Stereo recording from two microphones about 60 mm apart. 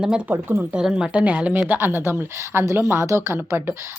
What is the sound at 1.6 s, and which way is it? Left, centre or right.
A woman's voice, right.